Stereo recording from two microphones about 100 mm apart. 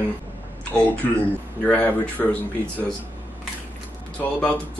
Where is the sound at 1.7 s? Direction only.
15° left (ahead or behind).